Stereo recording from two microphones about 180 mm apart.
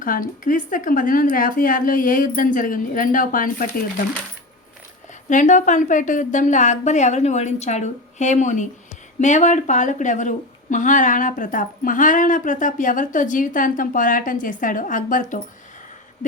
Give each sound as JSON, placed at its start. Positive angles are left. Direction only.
{"t": 0.0, "sound": "a woman's voice", "side_deg": 50}
{"t": 5.3, "sound": "a woman's voice", "side_deg": 45}